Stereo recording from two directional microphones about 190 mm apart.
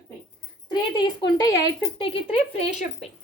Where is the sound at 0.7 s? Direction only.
25° left (ahead or behind).